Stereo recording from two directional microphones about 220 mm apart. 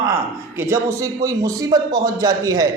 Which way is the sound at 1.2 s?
15° right (ahead or behind).